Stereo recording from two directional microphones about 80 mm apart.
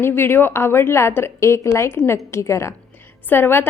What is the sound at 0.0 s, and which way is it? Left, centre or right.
A woman's voice, left.